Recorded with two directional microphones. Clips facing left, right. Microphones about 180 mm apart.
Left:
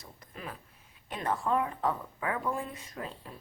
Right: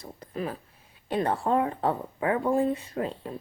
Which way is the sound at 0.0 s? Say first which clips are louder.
Right 11 dB; 35° right (ahead or behind).